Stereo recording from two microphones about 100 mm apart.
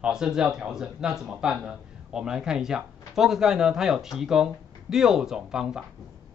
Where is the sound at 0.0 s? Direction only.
5° right (ahead or behind).